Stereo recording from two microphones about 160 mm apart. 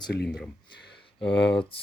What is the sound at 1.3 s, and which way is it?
Speech, 90° left.